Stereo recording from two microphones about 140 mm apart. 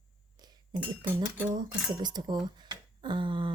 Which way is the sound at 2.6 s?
35° right (ahead or behind).